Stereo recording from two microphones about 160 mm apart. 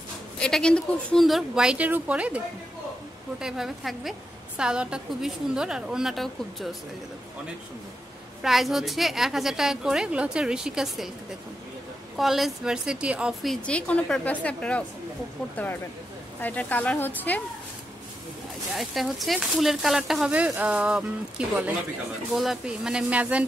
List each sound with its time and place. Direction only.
0.4 s speech: 5° left (ahead or behind)
8.4 s speech: centre (ahead or behind)
12.2 s speech: centre (ahead or behind)
18.8 s speech: centre (ahead or behind)